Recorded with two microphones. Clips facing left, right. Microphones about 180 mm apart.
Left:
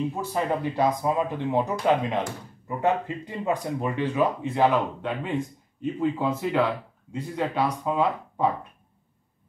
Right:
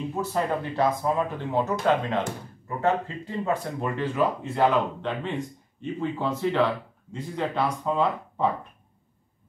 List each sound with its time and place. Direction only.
0.3 s speech: 15° left (ahead or behind)